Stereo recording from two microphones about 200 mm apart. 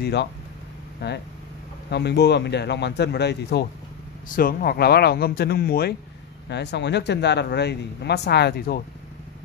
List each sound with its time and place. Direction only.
0.0 s speech: 60° left (ahead or behind)
4.4 s speech: 45° left (ahead or behind)